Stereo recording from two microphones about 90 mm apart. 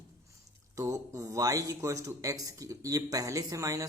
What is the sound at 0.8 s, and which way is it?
Speech, 35° right (ahead or behind).